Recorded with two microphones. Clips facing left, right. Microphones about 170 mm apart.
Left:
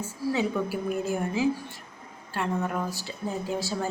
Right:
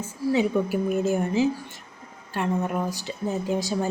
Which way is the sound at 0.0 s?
20° right (ahead or behind).